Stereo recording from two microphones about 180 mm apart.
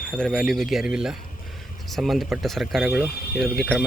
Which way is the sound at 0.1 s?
Centre (ahead or behind).